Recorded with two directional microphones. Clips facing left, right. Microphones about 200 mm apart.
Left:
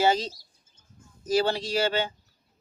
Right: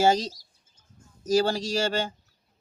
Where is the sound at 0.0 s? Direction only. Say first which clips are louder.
Right 2 dB; 45° right (ahead or behind).